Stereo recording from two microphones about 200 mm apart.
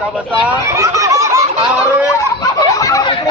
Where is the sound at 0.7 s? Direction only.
15° right (ahead or behind).